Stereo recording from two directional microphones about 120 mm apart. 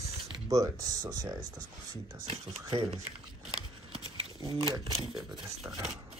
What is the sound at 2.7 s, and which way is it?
Speech, 50° right (ahead or behind).